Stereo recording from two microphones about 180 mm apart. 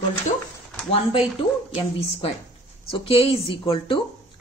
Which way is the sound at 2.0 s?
30° left (ahead or behind).